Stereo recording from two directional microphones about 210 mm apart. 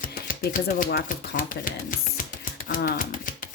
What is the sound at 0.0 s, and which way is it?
Speech, 40° left (ahead or behind).